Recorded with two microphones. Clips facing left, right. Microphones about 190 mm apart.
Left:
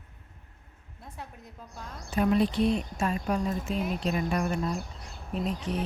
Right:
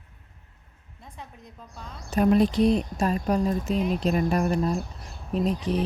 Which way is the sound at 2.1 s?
45° right (ahead or behind).